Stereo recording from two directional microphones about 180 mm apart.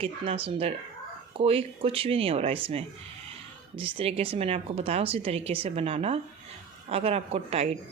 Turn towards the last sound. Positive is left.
turn(degrees=-35)  # may be behind; listen again after turning